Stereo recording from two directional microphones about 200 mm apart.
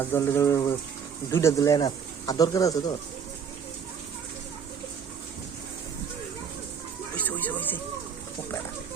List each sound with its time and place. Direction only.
0.0 s speech: 10° left (ahead or behind)
7.2 s music: 10° left (ahead or behind)